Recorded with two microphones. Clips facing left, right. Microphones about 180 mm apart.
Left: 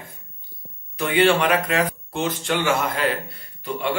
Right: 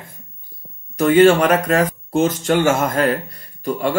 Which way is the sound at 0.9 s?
40° right (ahead or behind).